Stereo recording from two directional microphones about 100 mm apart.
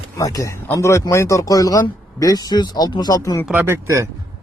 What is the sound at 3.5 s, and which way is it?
Speech, 25° right (ahead or behind).